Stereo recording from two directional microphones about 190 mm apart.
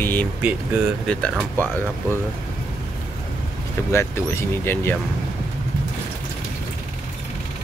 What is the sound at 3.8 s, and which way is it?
Speech, 15° left (ahead or behind).